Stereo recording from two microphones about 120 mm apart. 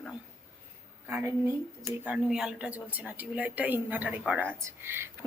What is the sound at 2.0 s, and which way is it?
A woman's voice, 10° right (ahead or behind).